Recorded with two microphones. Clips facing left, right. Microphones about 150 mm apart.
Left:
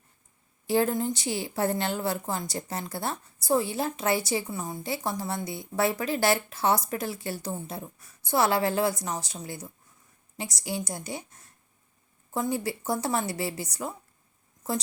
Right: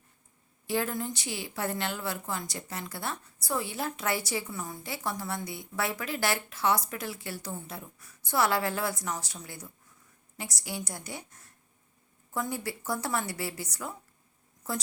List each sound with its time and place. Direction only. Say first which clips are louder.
0.7 s a woman's voice: left 6 dB; 30° left (ahead or behind)
12.3 s speech: left 5 dB; 25° left (ahead or behind)